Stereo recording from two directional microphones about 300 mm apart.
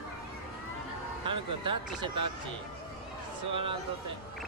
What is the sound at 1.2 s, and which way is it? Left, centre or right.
Speech, centre.